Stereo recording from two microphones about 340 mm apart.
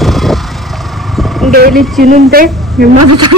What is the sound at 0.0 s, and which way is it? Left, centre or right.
Vehicle, centre.